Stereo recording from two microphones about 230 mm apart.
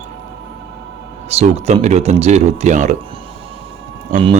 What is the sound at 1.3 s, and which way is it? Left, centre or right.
Speech, right.